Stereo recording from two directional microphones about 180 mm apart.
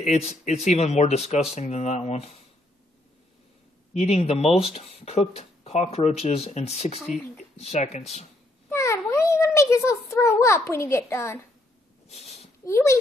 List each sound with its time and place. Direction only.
0.0 s speech: 35° left (ahead or behind)
3.9 s speech: 35° left (ahead or behind)
7.0 s speech: centre (ahead or behind)
7.5 s speech: 35° left (ahead or behind)
8.6 s a sound: 15° left (ahead or behind)
12.1 s a sound: 35° left (ahead or behind)
12.6 s a child's voice: 15° left (ahead or behind)